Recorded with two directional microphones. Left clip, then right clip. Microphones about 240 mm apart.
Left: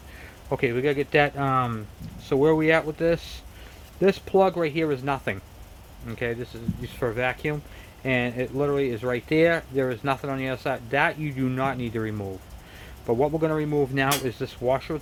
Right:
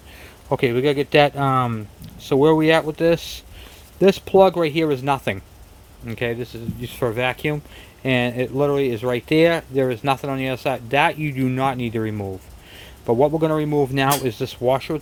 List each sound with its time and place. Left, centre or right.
0.4 s speech: right